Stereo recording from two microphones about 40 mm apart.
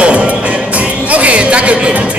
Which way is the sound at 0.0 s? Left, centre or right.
Right.